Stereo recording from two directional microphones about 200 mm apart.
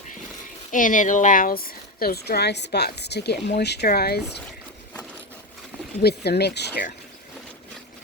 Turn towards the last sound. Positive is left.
turn(degrees=55)  # may be behind; listen again after turning